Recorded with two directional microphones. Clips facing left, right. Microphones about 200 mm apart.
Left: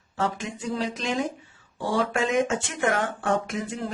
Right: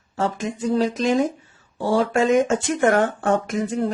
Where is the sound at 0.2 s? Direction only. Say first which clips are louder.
Right 5 dB; 40° right (ahead or behind).